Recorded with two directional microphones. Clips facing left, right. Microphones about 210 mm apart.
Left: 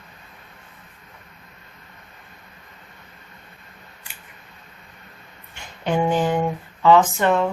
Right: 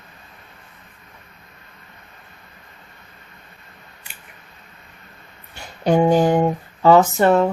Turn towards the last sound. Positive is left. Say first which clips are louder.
# right 3 dB
turn(degrees=-40)  # may be behind; listen again after turning